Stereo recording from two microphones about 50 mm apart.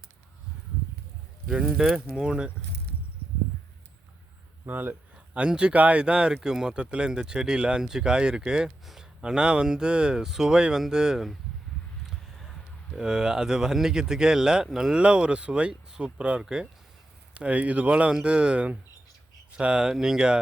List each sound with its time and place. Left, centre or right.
1.5 s speech: centre
4.6 s speech: right
5.1 s a sound: right
5.5 s speech: right
12.1 s a sound: centre
13.1 s speech: centre